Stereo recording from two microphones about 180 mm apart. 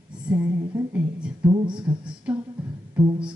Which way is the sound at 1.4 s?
5° right (ahead or behind).